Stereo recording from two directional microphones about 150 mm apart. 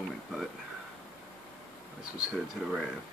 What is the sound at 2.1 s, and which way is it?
Speech, 5° right (ahead or behind).